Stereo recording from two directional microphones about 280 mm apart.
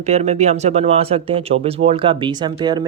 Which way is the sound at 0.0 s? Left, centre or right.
Right.